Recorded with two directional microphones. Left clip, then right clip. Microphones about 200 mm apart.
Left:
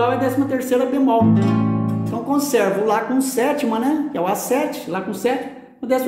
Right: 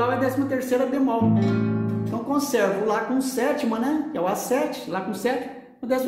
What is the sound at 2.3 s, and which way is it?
Speech, 25° left (ahead or behind).